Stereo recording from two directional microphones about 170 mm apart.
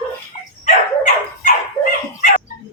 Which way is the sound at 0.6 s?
50° left (ahead or behind).